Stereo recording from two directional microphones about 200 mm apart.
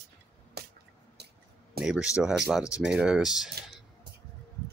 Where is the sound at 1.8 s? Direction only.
5° right (ahead or behind).